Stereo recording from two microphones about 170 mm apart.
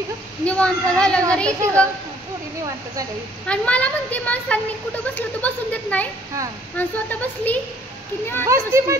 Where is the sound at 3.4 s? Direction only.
5° left (ahead or behind).